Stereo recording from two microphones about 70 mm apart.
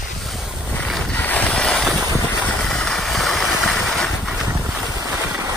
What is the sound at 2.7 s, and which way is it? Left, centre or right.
Vehicle, centre.